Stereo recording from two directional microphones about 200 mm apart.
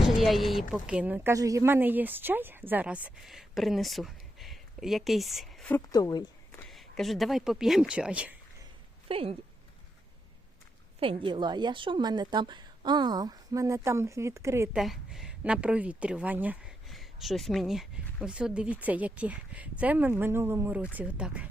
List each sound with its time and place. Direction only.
0.2 s a woman's voice: centre (ahead or behind)
5.7 s speech: 20° left (ahead or behind)
6.7 s speech: centre (ahead or behind)
9.0 s speech: 30° right (ahead or behind)
11.0 s a woman's voice: 25° right (ahead or behind)
14.8 s a woman's voice: centre (ahead or behind)